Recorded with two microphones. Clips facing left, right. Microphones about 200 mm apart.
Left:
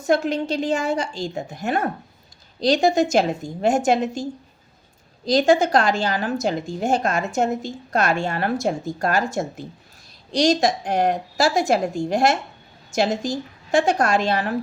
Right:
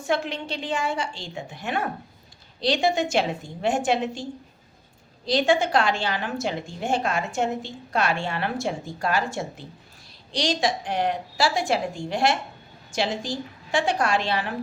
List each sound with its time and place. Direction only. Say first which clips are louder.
0.0 s a woman's voice: left 6 dB; 40° left (ahead or behind)